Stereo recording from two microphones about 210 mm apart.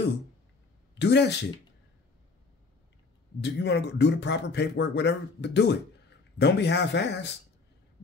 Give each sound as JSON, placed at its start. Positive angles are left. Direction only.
{"t": 0.9, "sound": "speech", "side_deg": 55}
{"t": 3.3, "sound": "speech", "side_deg": 55}